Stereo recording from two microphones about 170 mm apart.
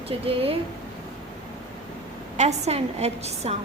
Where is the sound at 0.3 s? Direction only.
35° right (ahead or behind).